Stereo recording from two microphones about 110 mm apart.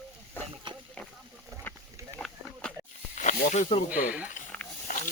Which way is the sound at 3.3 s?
90° left.